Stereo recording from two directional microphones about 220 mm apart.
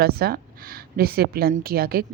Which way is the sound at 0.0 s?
45° right (ahead or behind).